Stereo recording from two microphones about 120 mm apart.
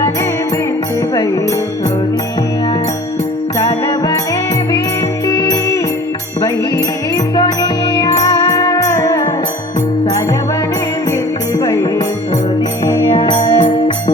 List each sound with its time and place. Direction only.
1.1 s music: 35° left (ahead or behind)
3.6 s music: 35° left (ahead or behind)
5.2 s music: 35° left (ahead or behind)
7.3 s music: 35° left (ahead or behind)
11.6 s music: 30° left (ahead or behind)
13.1 s music: 40° left (ahead or behind)